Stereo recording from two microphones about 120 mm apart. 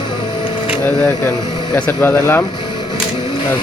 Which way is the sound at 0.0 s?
45° left (ahead or behind).